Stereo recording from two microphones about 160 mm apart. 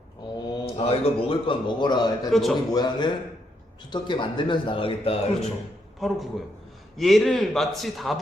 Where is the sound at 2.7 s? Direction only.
25° left (ahead or behind).